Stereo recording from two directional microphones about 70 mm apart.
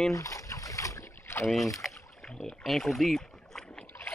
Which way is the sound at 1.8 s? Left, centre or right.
Centre.